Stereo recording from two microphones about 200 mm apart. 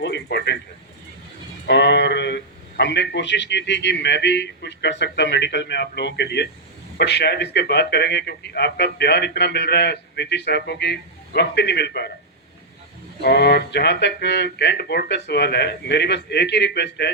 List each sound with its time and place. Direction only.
0.0 s a sound: 55° left (ahead or behind)
1.6 s a man's voice: 60° left (ahead or behind)
13.2 s a man's voice: 55° left (ahead or behind)